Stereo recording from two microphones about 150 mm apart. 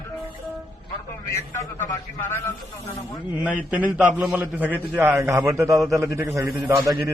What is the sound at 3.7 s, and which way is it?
A man's voice, 10° right (ahead or behind).